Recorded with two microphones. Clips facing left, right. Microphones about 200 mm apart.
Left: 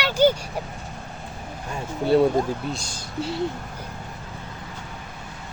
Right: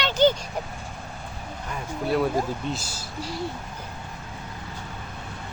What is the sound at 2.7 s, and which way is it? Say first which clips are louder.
Speech: even; 5° right (ahead or behind).